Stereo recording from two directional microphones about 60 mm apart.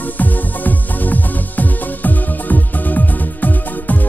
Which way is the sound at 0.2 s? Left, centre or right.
Left.